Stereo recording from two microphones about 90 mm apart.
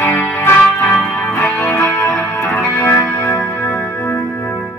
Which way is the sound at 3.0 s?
35° left (ahead or behind).